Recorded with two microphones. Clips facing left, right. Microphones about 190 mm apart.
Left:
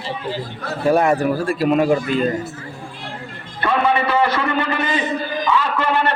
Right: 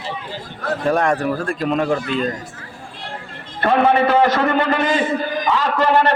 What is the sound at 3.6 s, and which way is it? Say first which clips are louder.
A man's voice: right 3 dB; 45° right (ahead or behind).